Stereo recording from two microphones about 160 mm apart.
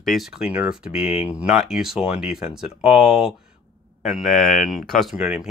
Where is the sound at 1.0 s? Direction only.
35° left (ahead or behind).